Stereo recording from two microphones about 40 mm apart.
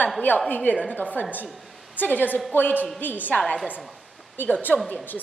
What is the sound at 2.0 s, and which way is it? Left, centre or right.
A woman's voice, left.